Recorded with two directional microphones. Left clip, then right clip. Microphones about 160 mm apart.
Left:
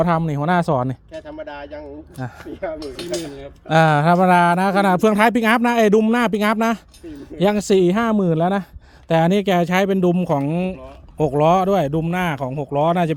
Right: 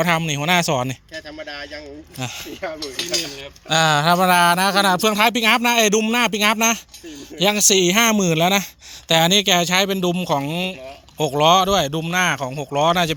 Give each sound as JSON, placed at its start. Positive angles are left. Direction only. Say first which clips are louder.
{"t": 0.0, "sound": "speech", "louder": "even", "side_deg": 15}
{"t": 2.1, "sound": "speech", "louder": "right 5 dB", "side_deg": -5}
{"t": 3.2, "sound": "speech", "louder": "right 1 dB", "side_deg": 35}
{"t": 9.0, "sound": "speech", "louder": "right 2 dB", "side_deg": 20}